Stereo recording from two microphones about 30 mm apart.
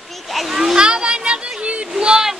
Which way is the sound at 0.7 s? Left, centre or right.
Right.